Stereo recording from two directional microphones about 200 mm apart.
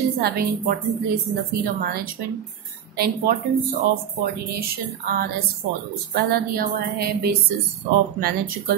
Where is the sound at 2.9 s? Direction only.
50° right (ahead or behind).